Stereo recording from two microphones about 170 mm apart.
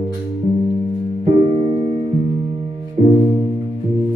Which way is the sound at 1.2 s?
40° right (ahead or behind).